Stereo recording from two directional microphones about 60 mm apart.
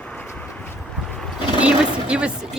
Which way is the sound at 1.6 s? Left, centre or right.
Centre.